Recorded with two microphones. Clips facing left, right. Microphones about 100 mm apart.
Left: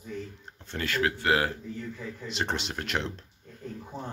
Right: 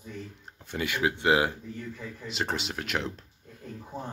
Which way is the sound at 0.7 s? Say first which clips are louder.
Even; 10° right (ahead or behind).